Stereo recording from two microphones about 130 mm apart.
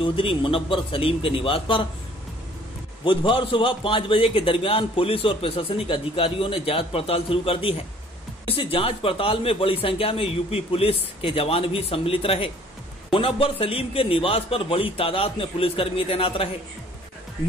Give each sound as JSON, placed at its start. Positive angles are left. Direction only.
{"t": 0.0, "sound": "a man's voice", "side_deg": 45}
{"t": 3.0, "sound": "a man's voice", "side_deg": 40}